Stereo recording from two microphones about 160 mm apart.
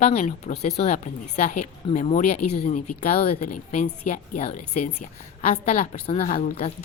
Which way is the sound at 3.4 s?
50° left (ahead or behind).